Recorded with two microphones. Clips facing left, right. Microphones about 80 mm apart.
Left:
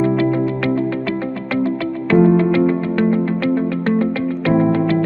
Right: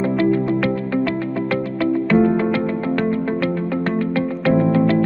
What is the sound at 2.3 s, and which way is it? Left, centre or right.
Music, centre.